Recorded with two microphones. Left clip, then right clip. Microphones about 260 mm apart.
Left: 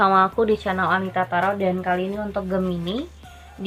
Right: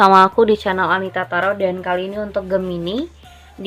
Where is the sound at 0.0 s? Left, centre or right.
Right.